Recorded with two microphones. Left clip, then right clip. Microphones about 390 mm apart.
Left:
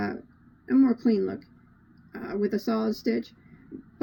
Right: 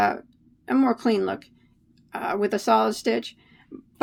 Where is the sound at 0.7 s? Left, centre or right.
Right.